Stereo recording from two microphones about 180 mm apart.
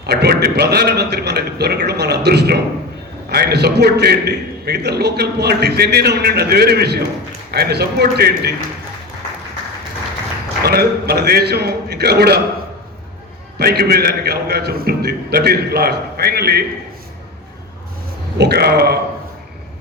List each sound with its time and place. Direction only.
0.0 s a man's voice: 60° right (ahead or behind)
10.6 s a man's voice: 60° right (ahead or behind)
13.6 s a man's voice: 60° right (ahead or behind)
18.3 s a man's voice: 65° right (ahead or behind)